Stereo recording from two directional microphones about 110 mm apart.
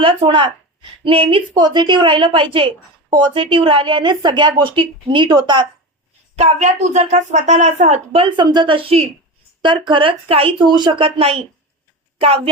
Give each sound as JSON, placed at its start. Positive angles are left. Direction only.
{"t": 0.0, "sound": "a woman's voice", "side_deg": -50}
{"t": 1.5, "sound": "a woman's voice", "side_deg": -40}
{"t": 6.3, "sound": "a woman's voice", "side_deg": -90}
{"t": 8.4, "sound": "a woman's voice", "side_deg": -45}
{"t": 9.6, "sound": "a woman's voice", "side_deg": -45}
{"t": 10.7, "sound": "a woman's voice", "side_deg": -45}